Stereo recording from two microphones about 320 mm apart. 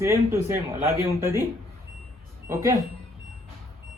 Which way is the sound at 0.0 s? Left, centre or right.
Centre.